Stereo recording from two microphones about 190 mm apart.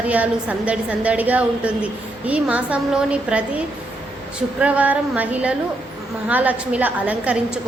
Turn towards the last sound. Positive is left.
turn(degrees=-5)  # may be behind; listen again after turning